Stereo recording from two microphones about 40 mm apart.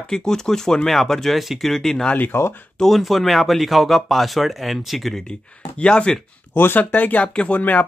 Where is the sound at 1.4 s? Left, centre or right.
Centre.